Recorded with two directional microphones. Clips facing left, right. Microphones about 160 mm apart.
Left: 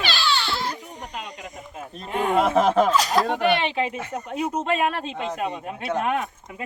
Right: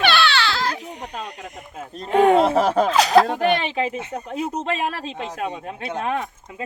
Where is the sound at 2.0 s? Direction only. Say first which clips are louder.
Right 10 dB; 85° right.